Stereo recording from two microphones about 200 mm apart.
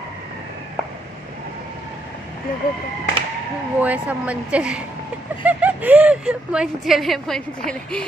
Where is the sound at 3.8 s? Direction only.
5° right (ahead or behind).